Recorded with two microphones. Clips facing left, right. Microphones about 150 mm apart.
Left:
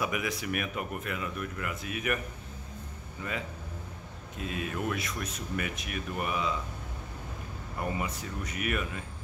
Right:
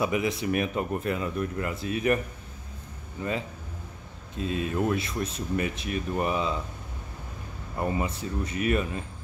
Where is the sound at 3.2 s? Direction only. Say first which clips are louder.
Right 6 dB; 30° right (ahead or behind).